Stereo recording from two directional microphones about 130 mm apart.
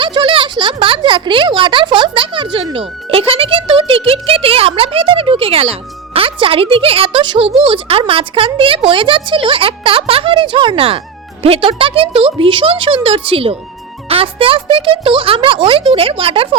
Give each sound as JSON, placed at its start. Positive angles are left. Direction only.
{"t": 0.0, "sound": "speech", "side_deg": -40}